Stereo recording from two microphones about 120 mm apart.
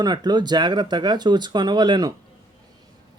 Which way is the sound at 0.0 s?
35° right (ahead or behind).